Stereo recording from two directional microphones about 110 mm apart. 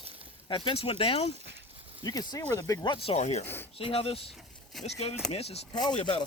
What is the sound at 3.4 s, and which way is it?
Speech, 20° left (ahead or behind).